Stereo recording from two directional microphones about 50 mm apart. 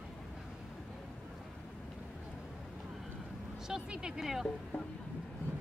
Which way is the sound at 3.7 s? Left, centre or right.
Centre.